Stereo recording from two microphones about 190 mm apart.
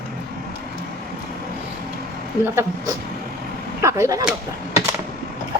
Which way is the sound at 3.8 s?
15° right (ahead or behind).